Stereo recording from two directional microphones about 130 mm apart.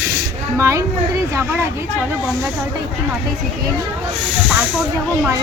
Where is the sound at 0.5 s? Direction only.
20° right (ahead or behind).